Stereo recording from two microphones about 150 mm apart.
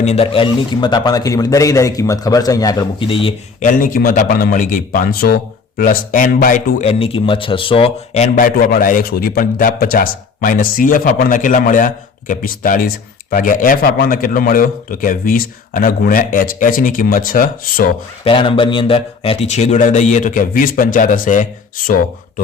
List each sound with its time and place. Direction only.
0.0 s a man's voice: 45° left (ahead or behind)
3.6 s speech: 60° left (ahead or behind)
6.8 s speech: 40° left (ahead or behind); by 17.9 s 70° left (ahead or behind)
18.3 s a man's voice: 35° left (ahead or behind); by 22.0 s 70° left (ahead or behind)